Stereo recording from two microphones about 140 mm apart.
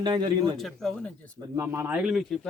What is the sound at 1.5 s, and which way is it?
Speech, 20° right (ahead or behind).